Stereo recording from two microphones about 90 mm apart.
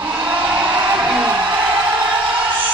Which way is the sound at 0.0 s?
20° right (ahead or behind).